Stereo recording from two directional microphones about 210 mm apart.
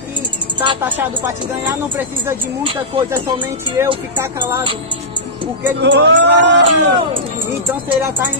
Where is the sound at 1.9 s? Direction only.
10° right (ahead or behind).